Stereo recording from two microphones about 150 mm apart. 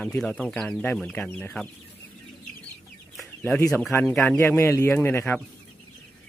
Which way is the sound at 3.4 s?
15° left (ahead or behind).